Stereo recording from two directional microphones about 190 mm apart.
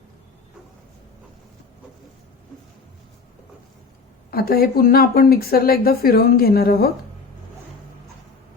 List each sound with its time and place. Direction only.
4.3 s speech: 55° left (ahead or behind)